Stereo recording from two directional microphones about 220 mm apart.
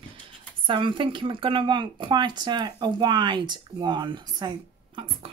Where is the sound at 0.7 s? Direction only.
20° right (ahead or behind).